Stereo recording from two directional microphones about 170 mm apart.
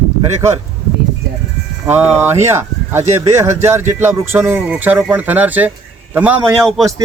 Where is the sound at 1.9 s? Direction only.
10° right (ahead or behind).